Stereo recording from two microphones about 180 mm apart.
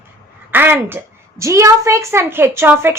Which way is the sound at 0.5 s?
10° right (ahead or behind).